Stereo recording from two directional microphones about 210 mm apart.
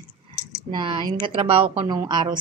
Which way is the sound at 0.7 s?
25° right (ahead or behind).